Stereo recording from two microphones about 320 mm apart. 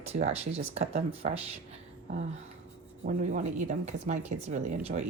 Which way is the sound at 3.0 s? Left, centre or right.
Right.